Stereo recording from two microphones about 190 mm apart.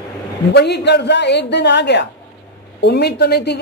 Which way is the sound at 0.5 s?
60° left (ahead or behind).